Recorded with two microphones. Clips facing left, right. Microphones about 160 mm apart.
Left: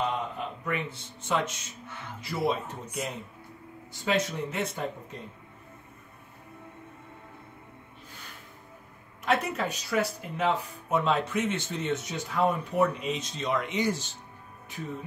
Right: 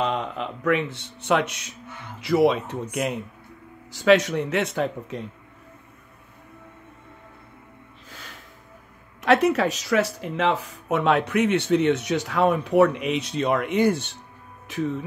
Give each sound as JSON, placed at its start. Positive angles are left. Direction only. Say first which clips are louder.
{"t": 0.0, "sound": "speech", "louder": "right 5 dB", "side_deg": -90}
{"t": 2.2, "sound": "speech", "louder": "right 10 dB", "side_deg": -85}
{"t": 3.9, "sound": "speech", "louder": "right 10 dB", "side_deg": -90}
{"t": 9.2, "sound": "speech", "louder": "right 9 dB", "side_deg": -80}
{"t": 14.7, "sound": "speech", "louder": "right 12 dB", "side_deg": -85}